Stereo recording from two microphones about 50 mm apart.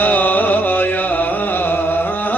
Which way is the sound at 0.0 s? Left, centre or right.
Left.